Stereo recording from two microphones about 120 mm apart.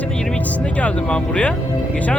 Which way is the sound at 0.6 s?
10° left (ahead or behind).